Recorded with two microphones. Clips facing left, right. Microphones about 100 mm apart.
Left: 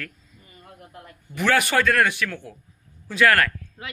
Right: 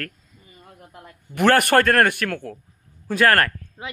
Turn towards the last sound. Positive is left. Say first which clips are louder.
# right 3 dB
turn(degrees=-20)  # may be behind; listen again after turning